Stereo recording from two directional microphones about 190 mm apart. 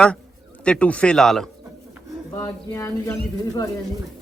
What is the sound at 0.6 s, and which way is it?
Speech, 5° left (ahead or behind).